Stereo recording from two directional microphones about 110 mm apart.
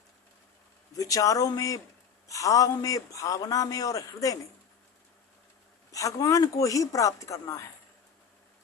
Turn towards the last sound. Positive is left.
turn(degrees=30)  # may be behind; listen again after turning